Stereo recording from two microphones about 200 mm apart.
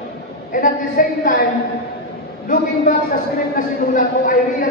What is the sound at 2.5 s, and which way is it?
A woman's voice, 45° left (ahead or behind).